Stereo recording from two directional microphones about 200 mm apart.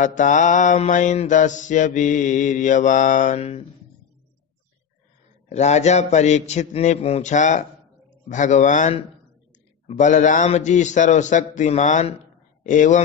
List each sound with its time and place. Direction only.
0.0 s mantra: 40° left (ahead or behind)
5.5 s mantra: 35° left (ahead or behind)